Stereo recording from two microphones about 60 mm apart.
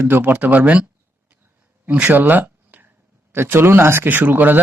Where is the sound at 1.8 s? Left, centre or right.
Right.